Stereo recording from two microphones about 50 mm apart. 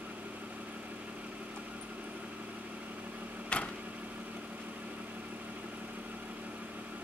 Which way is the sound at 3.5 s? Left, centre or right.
Left.